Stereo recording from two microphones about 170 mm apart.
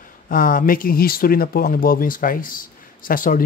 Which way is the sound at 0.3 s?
55° left (ahead or behind).